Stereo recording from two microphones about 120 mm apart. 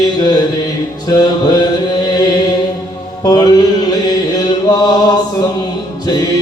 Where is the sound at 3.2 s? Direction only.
35° left (ahead or behind).